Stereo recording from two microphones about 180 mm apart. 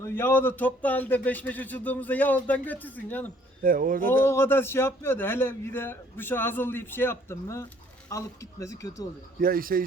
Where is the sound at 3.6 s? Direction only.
50° right (ahead or behind).